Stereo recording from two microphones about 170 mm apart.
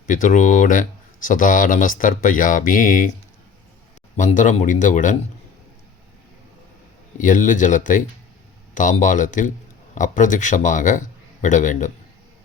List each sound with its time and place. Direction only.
0.1 s speech: 50° left (ahead or behind)
4.2 s speech: 45° left (ahead or behind)
7.2 s a man's voice: 50° left (ahead or behind)